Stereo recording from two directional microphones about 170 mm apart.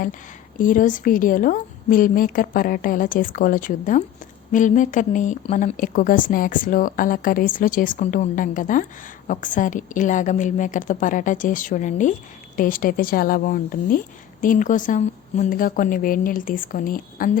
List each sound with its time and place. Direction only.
0.6 s a woman's voice: 50° left (ahead or behind)